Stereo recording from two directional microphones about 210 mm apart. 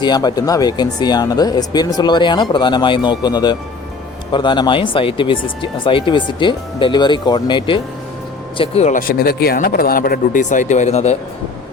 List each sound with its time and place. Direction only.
0.0 s speech: 20° left (ahead or behind)